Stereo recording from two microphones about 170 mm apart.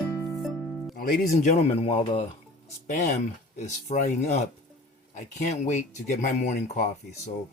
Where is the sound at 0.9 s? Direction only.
55° left (ahead or behind).